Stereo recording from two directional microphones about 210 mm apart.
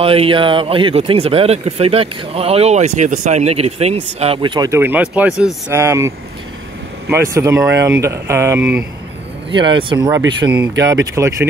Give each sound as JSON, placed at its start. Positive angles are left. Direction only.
{"t": 0.0, "sound": "speech", "side_deg": -25}
{"t": 9.5, "sound": "speech", "side_deg": -25}